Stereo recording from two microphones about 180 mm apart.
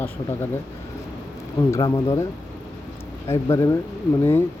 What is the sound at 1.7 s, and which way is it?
Speech, 15° left (ahead or behind).